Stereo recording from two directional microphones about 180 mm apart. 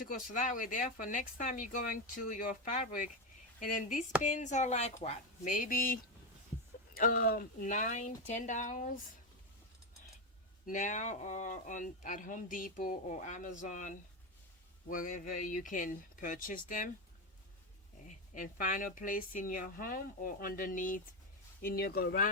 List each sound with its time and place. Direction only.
0.0 s speech: 50° left (ahead or behind)
10.7 s speech: 45° left (ahead or behind)
18.5 s speech: 50° left (ahead or behind)